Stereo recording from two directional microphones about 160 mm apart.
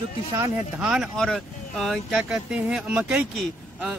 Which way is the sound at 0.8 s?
5° right (ahead or behind).